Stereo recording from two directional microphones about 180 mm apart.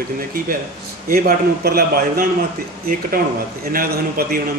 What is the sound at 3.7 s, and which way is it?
Speech, 55° right (ahead or behind).